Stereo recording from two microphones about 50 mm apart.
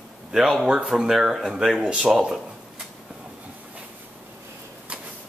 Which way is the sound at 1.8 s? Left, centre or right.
Right.